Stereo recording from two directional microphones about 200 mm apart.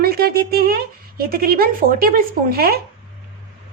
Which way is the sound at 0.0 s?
50° right (ahead or behind).